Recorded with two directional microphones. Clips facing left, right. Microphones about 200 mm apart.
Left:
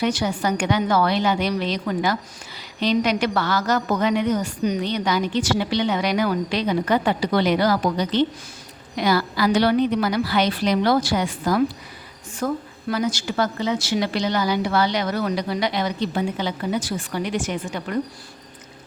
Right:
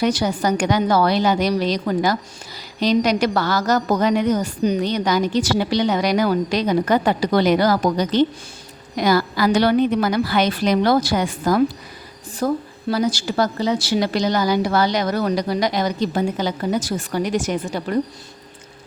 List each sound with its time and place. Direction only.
0.0 s a woman's voice: 40° right (ahead or behind)
12.4 s a woman's voice: 35° right (ahead or behind)